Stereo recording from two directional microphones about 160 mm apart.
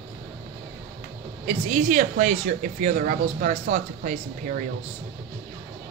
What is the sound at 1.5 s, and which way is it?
Speech, 50° right (ahead or behind).